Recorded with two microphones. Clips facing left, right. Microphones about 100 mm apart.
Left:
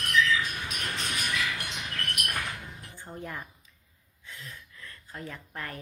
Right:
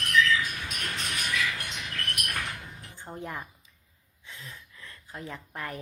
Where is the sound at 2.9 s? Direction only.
20° right (ahead or behind).